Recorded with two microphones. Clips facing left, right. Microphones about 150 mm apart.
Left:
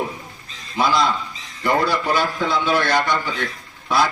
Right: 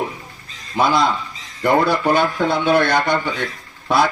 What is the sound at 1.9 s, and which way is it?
A man's voice, 55° right (ahead or behind).